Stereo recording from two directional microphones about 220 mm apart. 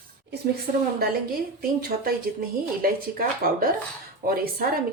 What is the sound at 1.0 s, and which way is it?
Speech, 40° right (ahead or behind).